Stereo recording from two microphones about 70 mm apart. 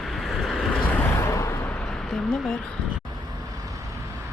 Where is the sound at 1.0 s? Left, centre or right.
Left.